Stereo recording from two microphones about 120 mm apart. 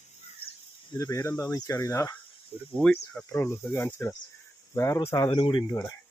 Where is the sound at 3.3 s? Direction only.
25° left (ahead or behind).